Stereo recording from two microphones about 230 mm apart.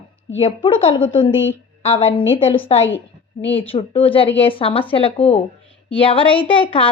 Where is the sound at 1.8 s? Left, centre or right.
Left.